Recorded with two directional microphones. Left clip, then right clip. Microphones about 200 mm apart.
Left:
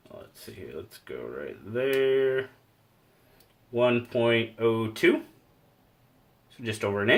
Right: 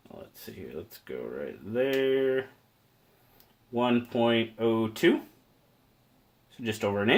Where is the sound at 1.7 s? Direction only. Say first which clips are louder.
Left 2 dB; 35° right (ahead or behind).